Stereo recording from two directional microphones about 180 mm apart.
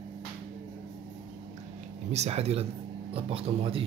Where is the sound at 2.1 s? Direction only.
35° right (ahead or behind).